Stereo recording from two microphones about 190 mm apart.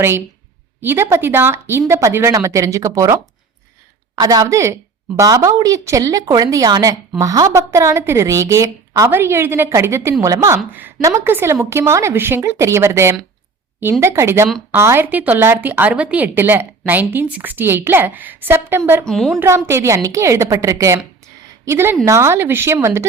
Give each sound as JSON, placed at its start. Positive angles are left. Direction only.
{"t": 0.8, "sound": "speech", "side_deg": -10}
{"t": 19.0, "sound": "a woman's voice", "side_deg": 0}
{"t": 19.4, "sound": "speech", "side_deg": -15}